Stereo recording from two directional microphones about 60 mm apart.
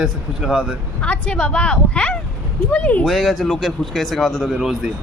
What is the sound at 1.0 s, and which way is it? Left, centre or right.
A woman's voice, left.